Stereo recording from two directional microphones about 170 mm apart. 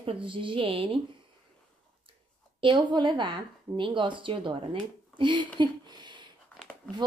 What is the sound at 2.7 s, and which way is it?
Speech, 25° right (ahead or behind).